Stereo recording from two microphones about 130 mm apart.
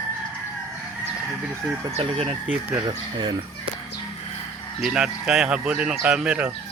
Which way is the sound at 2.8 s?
35° right (ahead or behind).